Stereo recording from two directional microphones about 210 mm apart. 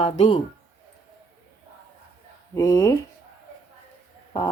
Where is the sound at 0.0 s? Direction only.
30° left (ahead or behind).